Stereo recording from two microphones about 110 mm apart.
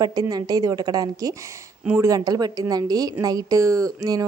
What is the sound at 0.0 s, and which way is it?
A woman's voice, 35° right (ahead or behind).